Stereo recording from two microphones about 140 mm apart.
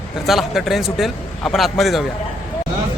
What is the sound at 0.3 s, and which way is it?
A man's voice, centre (ahead or behind).